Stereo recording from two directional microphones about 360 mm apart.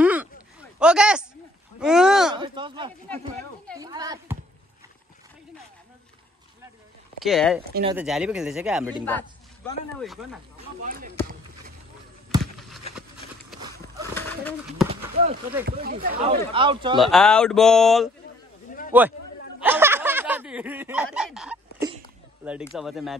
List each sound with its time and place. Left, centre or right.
0.0 s a sound: centre
1.8 s speech: centre
2.3 s a child's voice: centre
7.2 s speech: centre
10.8 s speech: right
12.5 s a sound: centre
14.1 s speech: centre
14.9 s clip-clop: centre
15.6 s speech: right
17.0 s a man's voice: centre
19.6 s snicker: centre
22.4 s speech: centre